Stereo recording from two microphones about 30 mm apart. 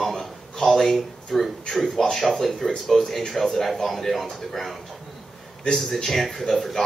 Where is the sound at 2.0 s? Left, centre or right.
Centre.